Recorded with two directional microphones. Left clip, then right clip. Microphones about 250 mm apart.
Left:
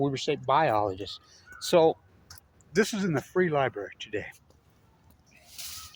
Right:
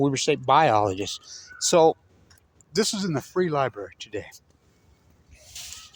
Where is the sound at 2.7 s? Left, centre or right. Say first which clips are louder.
Right 1 dB; centre.